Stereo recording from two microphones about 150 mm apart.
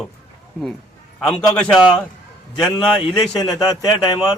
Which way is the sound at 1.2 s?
5° left (ahead or behind).